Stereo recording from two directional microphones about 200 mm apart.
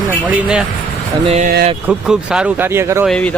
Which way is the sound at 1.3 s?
35° right (ahead or behind).